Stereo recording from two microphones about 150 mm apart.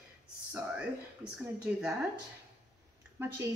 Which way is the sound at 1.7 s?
10° right (ahead or behind).